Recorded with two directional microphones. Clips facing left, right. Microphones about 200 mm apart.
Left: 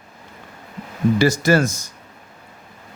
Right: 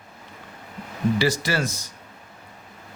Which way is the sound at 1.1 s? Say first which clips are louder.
Left 10 dB; 45° left (ahead or behind).